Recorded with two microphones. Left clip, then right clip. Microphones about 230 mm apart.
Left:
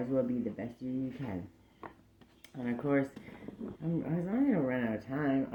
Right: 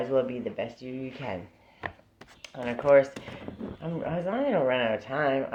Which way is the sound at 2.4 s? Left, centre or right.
Right.